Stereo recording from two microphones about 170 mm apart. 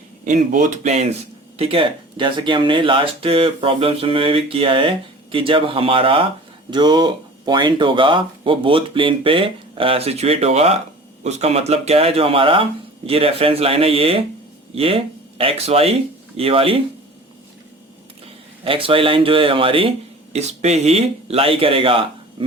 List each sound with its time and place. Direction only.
0.3 s speech: 50° right (ahead or behind); by 16.8 s 35° right (ahead or behind)
18.6 s speech: 30° right (ahead or behind)